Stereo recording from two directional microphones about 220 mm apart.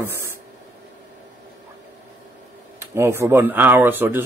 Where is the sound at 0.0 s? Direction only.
10° right (ahead or behind).